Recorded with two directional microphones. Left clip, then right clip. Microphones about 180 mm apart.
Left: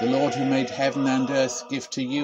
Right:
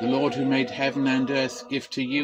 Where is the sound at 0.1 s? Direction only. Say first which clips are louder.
Left 1 dB; 20° left (ahead or behind).